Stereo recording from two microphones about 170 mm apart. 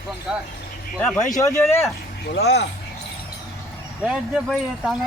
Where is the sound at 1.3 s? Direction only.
20° left (ahead or behind).